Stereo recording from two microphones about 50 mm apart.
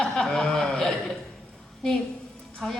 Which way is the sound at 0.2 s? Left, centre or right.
Centre.